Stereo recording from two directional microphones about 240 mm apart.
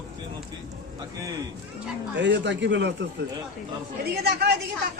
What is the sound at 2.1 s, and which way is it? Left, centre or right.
Speech, right.